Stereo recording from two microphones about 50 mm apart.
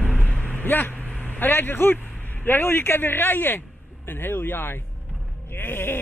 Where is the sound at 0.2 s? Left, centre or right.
Left.